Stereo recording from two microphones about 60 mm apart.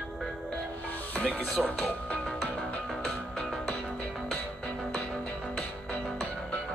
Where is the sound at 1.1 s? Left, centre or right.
Left.